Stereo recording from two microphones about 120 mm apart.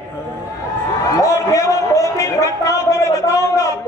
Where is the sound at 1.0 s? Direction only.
25° left (ahead or behind).